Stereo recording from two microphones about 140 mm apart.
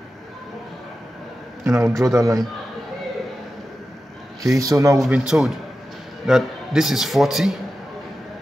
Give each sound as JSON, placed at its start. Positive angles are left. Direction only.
{"t": 1.6, "sound": "a man's voice", "side_deg": -20}
{"t": 1.9, "sound": "a man's voice", "side_deg": 0}
{"t": 2.1, "sound": "a man's voice", "side_deg": -25}
{"t": 4.4, "sound": "a man's voice", "side_deg": -25}
{"t": 5.0, "sound": "a man's voice", "side_deg": -5}